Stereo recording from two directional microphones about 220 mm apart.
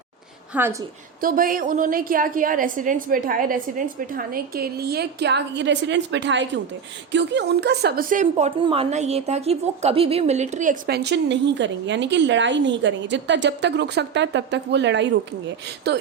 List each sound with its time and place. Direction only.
0.5 s a woman's voice: 10° right (ahead or behind)
1.2 s a woman's voice: 40° right (ahead or behind)